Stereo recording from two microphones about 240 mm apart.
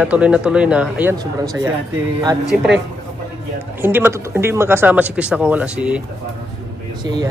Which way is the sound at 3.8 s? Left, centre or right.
Centre.